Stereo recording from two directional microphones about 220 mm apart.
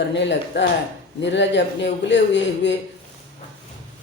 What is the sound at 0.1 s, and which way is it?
Speech, 55° left (ahead or behind).